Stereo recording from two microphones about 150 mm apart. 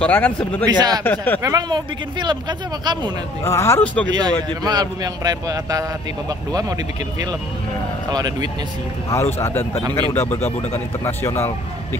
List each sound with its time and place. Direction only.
0.0 s speech: 10° left (ahead or behind)
0.7 s a man's voice: 25° right (ahead or behind)
1.0 s speech: 10° left (ahead or behind)
1.4 s a man's voice: 25° right (ahead or behind)
3.4 s speech: 20° left (ahead or behind)
4.1 s a man's voice: 30° right (ahead or behind)
8.1 s a man's voice: 25° right (ahead or behind)
9.1 s speech: 15° left (ahead or behind)
11.1 s speech: 15° left (ahead or behind)